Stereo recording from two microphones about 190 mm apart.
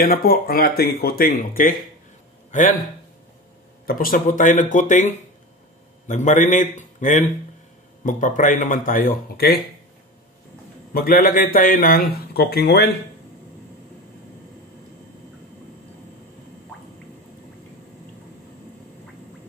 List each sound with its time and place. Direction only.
0.0 s speech: 50° left (ahead or behind)
3.8 s speech: 50° left (ahead or behind)
10.9 s speech: 50° left (ahead or behind)